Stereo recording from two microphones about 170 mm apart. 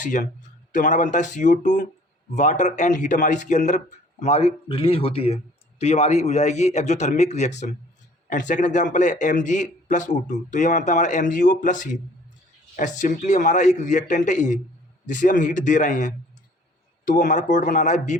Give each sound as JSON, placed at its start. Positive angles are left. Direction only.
{"t": 0.0, "sound": "a man's voice", "side_deg": 45}